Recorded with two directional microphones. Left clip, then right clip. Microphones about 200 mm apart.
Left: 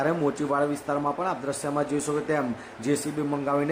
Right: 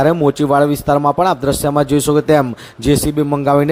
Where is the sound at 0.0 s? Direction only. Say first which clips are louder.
Right 12 dB; 40° right (ahead or behind).